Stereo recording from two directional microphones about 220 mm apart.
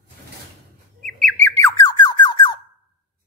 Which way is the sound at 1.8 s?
20° left (ahead or behind).